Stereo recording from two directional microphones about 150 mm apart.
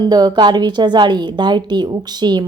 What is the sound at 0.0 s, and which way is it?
A woman's voice, 30° right (ahead or behind).